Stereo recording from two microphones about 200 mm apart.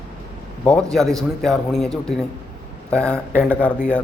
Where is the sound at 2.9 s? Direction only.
5° left (ahead or behind).